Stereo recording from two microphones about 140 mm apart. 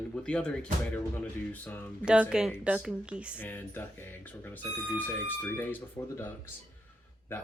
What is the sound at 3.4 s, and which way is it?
Speech, 15° left (ahead or behind).